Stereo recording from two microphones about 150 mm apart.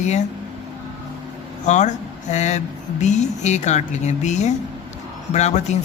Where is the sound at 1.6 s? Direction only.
55° left (ahead or behind).